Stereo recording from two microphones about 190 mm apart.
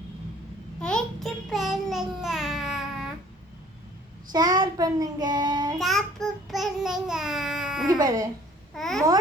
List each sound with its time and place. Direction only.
0.8 s babbling: 5° left (ahead or behind)
4.3 s child singing: 20° right (ahead or behind)
5.8 s child singing: centre (ahead or behind)
7.9 s speech: 20° right (ahead or behind)
8.7 s babbling: centre (ahead or behind)